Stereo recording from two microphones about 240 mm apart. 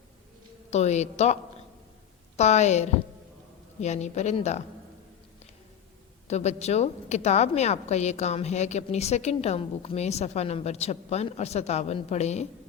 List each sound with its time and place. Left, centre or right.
0.7 s a woman's voice: left
6.2 s a woman's voice: left